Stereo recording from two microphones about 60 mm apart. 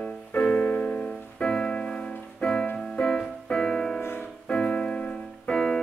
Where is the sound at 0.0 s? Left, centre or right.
Centre.